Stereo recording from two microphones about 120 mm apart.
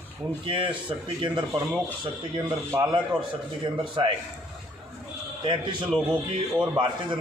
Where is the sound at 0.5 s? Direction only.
45° right (ahead or behind).